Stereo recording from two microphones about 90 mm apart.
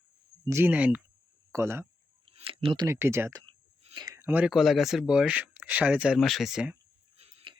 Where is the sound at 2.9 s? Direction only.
30° right (ahead or behind).